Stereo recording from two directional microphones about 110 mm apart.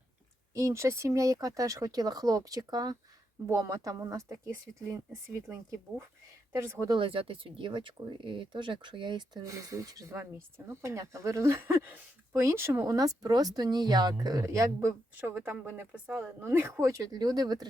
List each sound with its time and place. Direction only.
0.5 s speech: 30° right (ahead or behind)
6.9 s speech: 55° right (ahead or behind); by 17.7 s 35° right (ahead or behind)